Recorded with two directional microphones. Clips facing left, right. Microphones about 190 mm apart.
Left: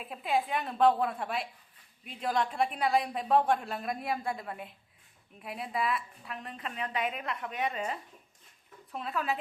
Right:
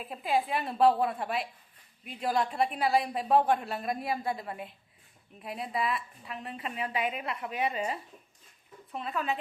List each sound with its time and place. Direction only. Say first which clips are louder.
0.0 s a woman's voice: right 1 dB; centre (ahead or behind)